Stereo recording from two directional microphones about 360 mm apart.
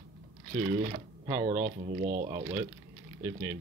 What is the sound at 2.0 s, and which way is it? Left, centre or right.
Speech, right.